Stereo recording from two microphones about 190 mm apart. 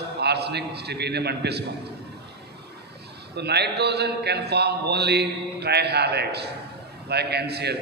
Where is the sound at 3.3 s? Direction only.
60° right (ahead or behind).